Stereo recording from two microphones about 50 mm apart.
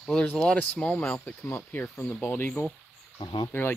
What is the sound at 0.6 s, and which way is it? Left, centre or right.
Speech, left.